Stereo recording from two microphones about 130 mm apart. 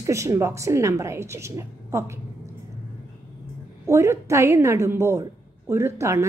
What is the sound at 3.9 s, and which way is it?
A woman's voice, 20° right (ahead or behind).